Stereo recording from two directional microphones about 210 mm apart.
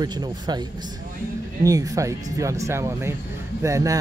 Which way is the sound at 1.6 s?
15° right (ahead or behind).